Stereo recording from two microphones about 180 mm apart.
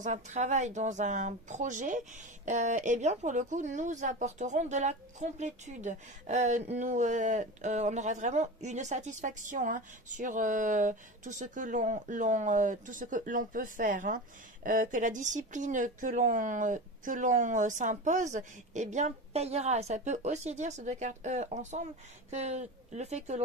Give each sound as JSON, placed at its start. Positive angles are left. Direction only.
{"t": 0.0, "sound": "speech", "side_deg": -45}